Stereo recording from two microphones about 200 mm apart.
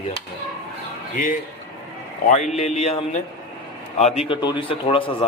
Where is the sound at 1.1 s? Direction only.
45° left (ahead or behind).